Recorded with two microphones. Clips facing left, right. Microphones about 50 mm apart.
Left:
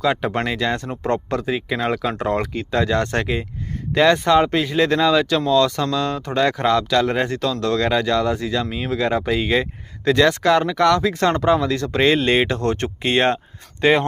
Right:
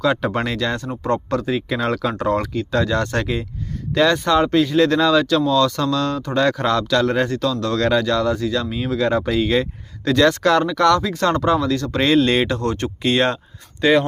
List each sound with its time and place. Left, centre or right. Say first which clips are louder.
0.0 s speech: right 1 dB; centre
0.8 s speech: right 1 dB; left
1.4 s speech: right 1 dB; centre
2.1 s speech: right 2 dB; left
5.8 s speech: right 1 dB; centre
6.1 s speech: right 1 dB; left
11.0 s speech: left 2 dB; left
11.3 s speech: even; centre
12.5 s speech: left 1 dB; left